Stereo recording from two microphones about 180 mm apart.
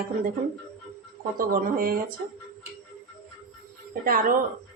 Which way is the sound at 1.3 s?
50° right (ahead or behind).